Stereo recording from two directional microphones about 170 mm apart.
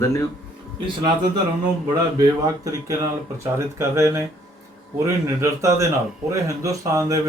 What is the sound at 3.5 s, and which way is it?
Speech, 15° right (ahead or behind).